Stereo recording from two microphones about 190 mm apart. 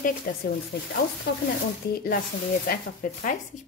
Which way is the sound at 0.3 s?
50° left (ahead or behind).